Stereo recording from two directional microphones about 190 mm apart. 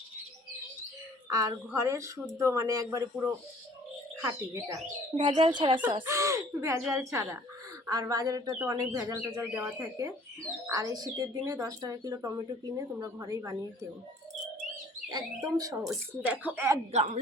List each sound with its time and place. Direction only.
1.3 s speech: 15° right (ahead or behind)
5.1 s speech: 25° right (ahead or behind)
5.8 s speech: 10° right (ahead or behind)
15.1 s speech: 20° right (ahead or behind)
15.9 s speech: 5° right (ahead or behind)
16.9 s speech: 40° right (ahead or behind)